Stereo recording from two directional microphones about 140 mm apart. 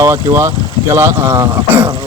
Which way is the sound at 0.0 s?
20° right (ahead or behind).